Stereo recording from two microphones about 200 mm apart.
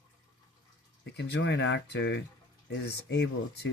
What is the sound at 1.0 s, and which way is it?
Speech, 60° left (ahead or behind).